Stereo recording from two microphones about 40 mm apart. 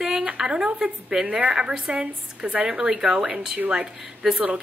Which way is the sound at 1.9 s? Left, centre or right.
Right.